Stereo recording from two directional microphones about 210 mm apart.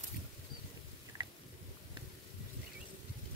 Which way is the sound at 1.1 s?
15° right (ahead or behind).